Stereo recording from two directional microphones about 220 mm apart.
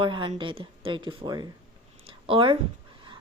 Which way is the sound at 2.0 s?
25° right (ahead or behind).